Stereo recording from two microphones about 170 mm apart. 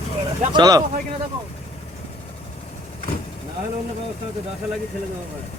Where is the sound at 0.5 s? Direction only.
25° right (ahead or behind).